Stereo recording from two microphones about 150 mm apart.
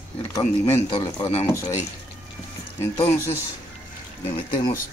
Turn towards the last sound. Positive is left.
turn(degrees=35)  # may be behind; listen again after turning